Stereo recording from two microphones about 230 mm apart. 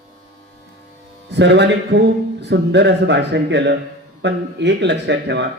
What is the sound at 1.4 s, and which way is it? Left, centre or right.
A man's voice, right.